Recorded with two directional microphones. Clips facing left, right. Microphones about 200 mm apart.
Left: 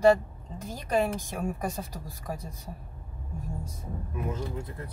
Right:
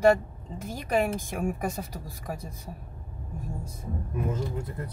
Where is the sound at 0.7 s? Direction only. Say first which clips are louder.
Right 1 dB; 10° right (ahead or behind).